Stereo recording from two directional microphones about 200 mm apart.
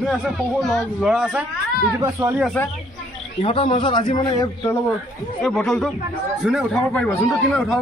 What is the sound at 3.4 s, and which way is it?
Speech, 30° left (ahead or behind).